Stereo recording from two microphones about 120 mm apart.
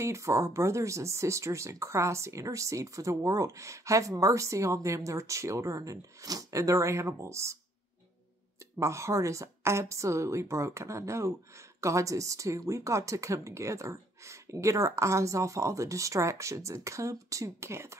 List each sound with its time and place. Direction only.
0.0 s a woman's voice: 25° right (ahead or behind)
8.7 s a woman's voice: 25° right (ahead or behind)